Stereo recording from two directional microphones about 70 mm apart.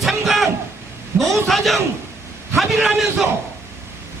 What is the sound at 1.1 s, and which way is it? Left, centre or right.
Speech, right.